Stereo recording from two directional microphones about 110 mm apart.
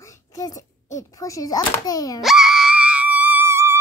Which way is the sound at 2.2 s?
5° right (ahead or behind).